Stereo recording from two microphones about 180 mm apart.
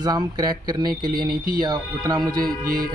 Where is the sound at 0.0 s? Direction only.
20° right (ahead or behind).